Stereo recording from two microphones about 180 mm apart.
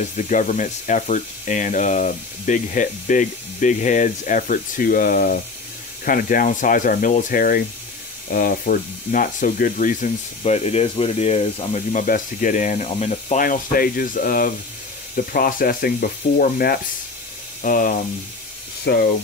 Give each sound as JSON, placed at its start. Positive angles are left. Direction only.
{"t": 0.0, "sound": "speech", "side_deg": 45}
{"t": 18.9, "sound": "speech", "side_deg": 70}